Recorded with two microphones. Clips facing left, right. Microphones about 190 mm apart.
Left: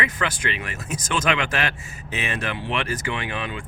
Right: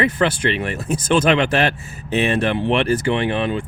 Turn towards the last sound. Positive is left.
turn(degrees=-30)  # may be behind; listen again after turning